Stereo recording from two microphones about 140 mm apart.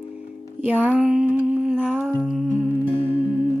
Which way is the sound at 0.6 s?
10° right (ahead or behind).